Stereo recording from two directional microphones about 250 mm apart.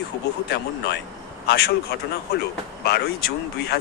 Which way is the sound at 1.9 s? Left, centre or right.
Left.